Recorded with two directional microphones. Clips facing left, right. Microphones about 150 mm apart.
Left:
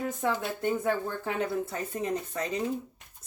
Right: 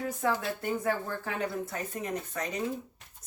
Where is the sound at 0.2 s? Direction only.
20° left (ahead or behind).